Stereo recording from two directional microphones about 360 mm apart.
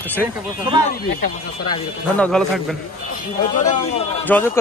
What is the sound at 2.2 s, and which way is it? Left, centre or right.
Speech, centre.